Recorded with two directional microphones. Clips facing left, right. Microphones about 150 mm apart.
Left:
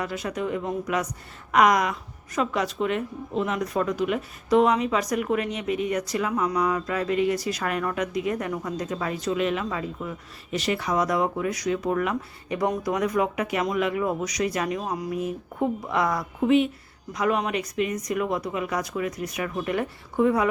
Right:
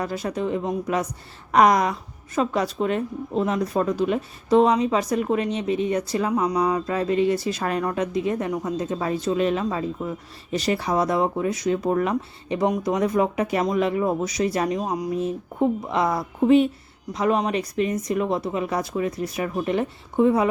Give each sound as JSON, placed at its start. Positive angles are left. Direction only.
{"t": 0.0, "sound": "a woman's voice", "side_deg": -35}
{"t": 14.8, "sound": "speech", "side_deg": -15}